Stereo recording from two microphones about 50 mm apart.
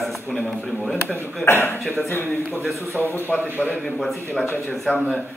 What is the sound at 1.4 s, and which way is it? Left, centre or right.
Speech, left.